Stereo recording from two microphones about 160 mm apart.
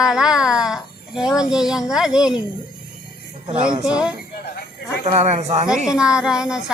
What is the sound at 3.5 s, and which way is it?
Speech, 35° right (ahead or behind).